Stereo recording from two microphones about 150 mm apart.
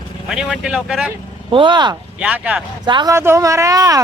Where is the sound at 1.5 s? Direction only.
30° right (ahead or behind).